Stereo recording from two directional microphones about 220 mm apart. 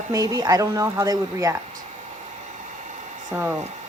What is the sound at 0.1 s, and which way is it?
A woman's voice, 15° right (ahead or behind).